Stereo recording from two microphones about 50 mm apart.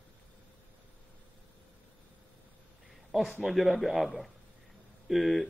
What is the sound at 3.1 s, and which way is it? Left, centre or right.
Speech, centre.